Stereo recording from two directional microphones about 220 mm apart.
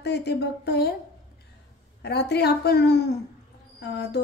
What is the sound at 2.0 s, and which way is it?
A woman's voice, 50° left (ahead or behind).